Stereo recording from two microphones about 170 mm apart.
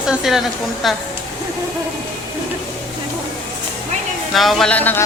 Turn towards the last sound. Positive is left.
turn(degrees=10)  # may be behind; listen again after turning